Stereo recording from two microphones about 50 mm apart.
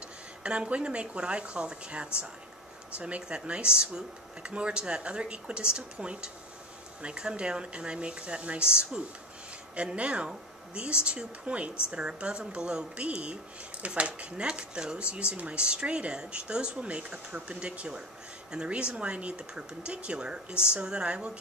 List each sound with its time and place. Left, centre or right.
0.4 s a woman's voice: right